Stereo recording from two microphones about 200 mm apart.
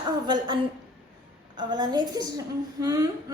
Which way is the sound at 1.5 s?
20° right (ahead or behind).